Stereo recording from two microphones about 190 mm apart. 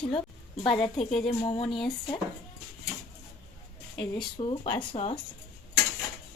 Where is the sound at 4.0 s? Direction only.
25° left (ahead or behind).